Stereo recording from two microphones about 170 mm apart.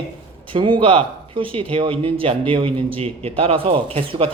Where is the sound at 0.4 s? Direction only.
30° right (ahead or behind).